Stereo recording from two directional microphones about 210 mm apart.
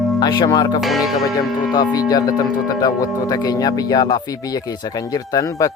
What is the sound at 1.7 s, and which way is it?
Speech, 20° left (ahead or behind).